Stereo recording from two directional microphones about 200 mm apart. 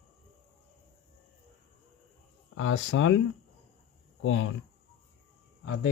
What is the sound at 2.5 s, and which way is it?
Speech, 85° left.